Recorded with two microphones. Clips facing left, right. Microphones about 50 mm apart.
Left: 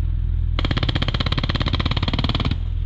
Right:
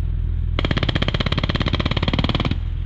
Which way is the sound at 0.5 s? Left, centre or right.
Right.